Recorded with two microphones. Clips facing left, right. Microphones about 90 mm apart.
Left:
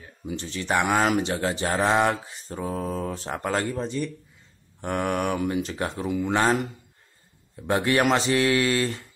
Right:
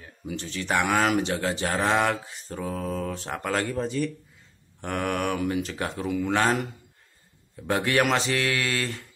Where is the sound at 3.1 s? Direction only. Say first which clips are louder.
Left 1 dB; 10° left (ahead or behind).